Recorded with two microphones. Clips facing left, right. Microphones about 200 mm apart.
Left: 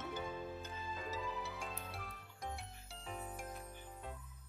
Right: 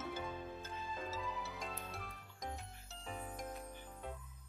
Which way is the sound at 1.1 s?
10° left (ahead or behind).